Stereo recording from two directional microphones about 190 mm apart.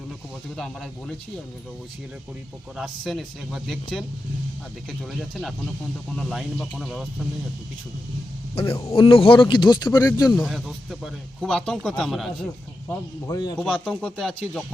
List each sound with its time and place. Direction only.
0.5 s speech: centre (ahead or behind)
2.7 s speech: centre (ahead or behind)
8.9 s speech: 30° left (ahead or behind)
10.4 s speech: centre (ahead or behind)
13.2 s speech: 20° left (ahead or behind)
13.6 s speech: 5° left (ahead or behind)